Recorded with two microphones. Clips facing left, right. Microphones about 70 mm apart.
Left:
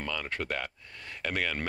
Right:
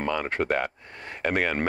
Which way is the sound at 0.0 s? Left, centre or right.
Right.